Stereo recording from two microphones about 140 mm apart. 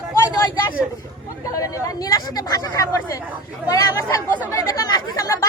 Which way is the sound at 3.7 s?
25° left (ahead or behind).